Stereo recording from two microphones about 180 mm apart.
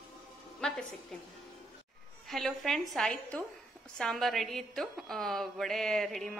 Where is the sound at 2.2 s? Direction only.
Centre (ahead or behind).